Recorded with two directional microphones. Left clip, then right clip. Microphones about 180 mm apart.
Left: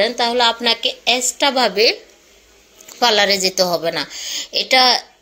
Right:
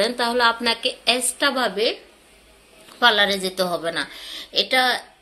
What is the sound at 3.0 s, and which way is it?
A woman's voice, 25° left (ahead or behind).